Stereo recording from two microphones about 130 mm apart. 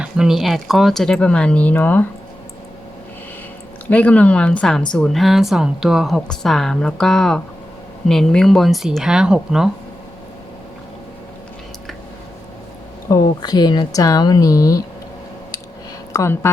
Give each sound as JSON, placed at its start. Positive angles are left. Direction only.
{"t": 0.0, "sound": "speech", "side_deg": -5}
{"t": 3.8, "sound": "speech", "side_deg": 10}
{"t": 13.1, "sound": "speech", "side_deg": 30}
{"t": 16.1, "sound": "speech", "side_deg": 20}